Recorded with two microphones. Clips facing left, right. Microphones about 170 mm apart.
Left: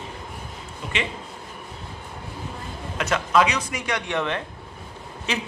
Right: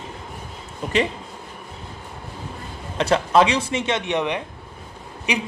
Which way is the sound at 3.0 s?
30° right (ahead or behind).